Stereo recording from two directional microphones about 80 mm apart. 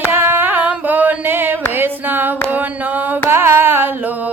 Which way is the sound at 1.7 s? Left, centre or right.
Right.